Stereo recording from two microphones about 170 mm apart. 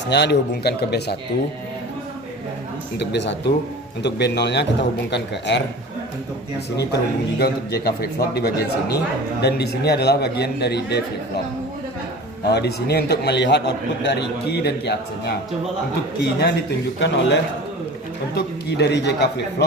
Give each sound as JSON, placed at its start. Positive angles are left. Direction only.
{"t": 0.1, "sound": "a man's voice", "side_deg": 80}
{"t": 3.0, "sound": "a man's voice", "side_deg": 90}
{"t": 6.7, "sound": "a man's voice", "side_deg": 75}
{"t": 12.5, "sound": "a man's voice", "side_deg": 75}
{"t": 17.0, "sound": "a man's voice", "side_deg": 90}